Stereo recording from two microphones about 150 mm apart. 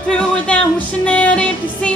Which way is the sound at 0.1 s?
10° left (ahead or behind).